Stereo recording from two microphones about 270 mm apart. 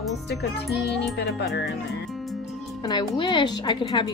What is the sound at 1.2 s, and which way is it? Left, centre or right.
Speech, left.